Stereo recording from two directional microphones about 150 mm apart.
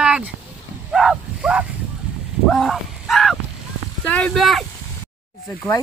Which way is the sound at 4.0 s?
10° left (ahead or behind).